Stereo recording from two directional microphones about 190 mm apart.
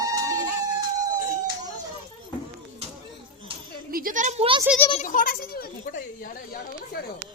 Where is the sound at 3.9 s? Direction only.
45° right (ahead or behind).